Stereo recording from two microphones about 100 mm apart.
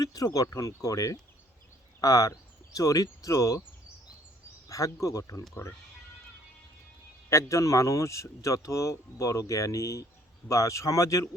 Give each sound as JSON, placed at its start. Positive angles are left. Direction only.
{"t": 0.0, "sound": "speech", "side_deg": 35}
{"t": 4.7, "sound": "speech", "side_deg": 35}
{"t": 7.3, "sound": "speech", "side_deg": 30}